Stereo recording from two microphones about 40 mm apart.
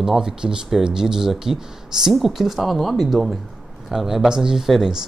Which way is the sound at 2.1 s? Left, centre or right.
Centre.